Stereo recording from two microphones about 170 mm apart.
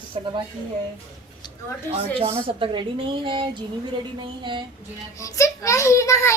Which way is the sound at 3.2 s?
30° right (ahead or behind).